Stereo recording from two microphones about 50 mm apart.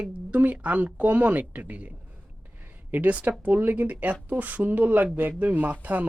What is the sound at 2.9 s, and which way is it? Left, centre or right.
Speech, right.